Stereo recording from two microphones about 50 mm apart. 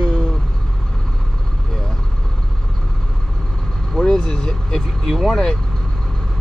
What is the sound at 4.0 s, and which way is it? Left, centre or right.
Vehicle, centre.